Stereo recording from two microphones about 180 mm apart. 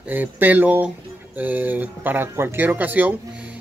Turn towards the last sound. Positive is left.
turn(degrees=-10)  # may be behind; listen again after turning